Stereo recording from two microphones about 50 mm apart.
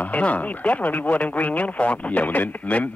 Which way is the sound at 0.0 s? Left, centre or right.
Left.